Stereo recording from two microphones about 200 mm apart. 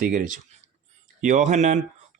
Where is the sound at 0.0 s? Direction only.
40° right (ahead or behind).